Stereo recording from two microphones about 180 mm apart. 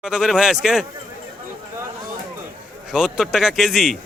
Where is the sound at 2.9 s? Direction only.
5° right (ahead or behind).